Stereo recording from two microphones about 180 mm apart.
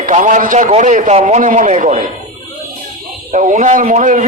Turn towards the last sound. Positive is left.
turn(degrees=-45)  # may be behind; listen again after turning